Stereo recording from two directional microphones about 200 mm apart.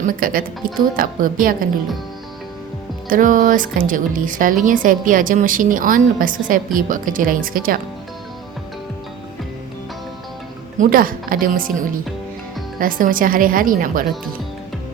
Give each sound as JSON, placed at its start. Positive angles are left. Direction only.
{"t": 0.2, "sound": "a woman's voice", "side_deg": -45}
{"t": 3.1, "sound": "a woman's voice", "side_deg": -40}
{"t": 10.8, "sound": "a woman's voice", "side_deg": -45}
{"t": 12.8, "sound": "a woman's voice", "side_deg": -45}